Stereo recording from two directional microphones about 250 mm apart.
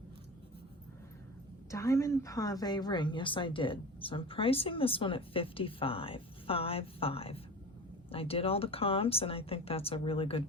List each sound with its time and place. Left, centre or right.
1.7 s a woman's voice: centre